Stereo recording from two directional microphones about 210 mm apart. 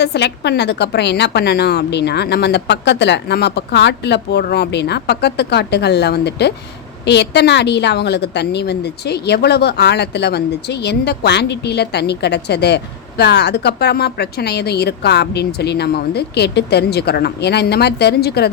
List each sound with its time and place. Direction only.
0.0 s a woman's voice: 55° left (ahead or behind)